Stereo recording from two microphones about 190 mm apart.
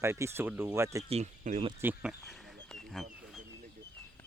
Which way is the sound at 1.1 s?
35° right (ahead or behind).